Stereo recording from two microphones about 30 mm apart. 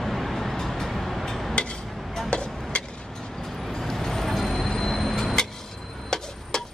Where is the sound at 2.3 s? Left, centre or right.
Left.